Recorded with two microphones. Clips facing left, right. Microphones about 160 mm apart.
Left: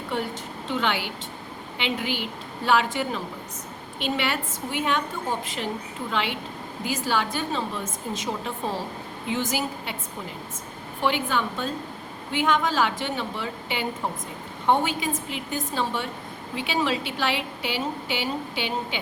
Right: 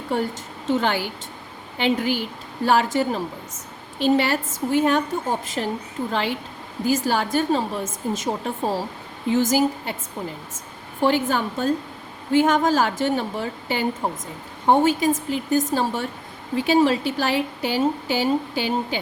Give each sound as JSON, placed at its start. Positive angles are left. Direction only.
{"t": 0.7, "sound": "a woman's voice", "side_deg": -40}
{"t": 11.0, "sound": "a woman's voice", "side_deg": -40}